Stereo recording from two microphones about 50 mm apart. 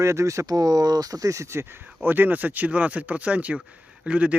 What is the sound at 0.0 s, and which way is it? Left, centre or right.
Speech, right.